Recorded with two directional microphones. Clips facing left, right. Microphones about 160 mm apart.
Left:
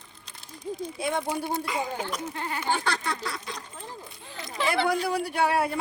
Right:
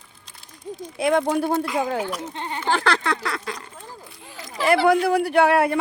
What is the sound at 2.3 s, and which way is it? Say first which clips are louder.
Speech: right 2 dB; 25° right (ahead or behind).